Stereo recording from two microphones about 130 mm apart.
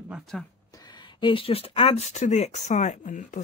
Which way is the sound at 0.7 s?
30° left (ahead or behind).